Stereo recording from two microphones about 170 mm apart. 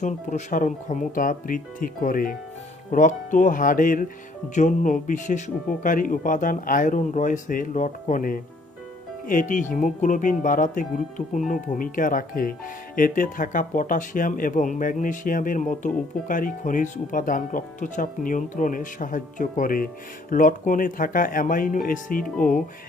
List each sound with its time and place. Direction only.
0.0 s speech: 45° left (ahead or behind)